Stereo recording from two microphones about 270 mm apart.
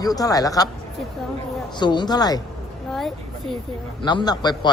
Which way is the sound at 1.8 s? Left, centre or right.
Centre.